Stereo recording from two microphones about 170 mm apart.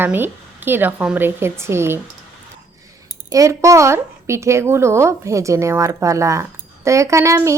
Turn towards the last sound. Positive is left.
turn(degrees=-15)  # may be behind; listen again after turning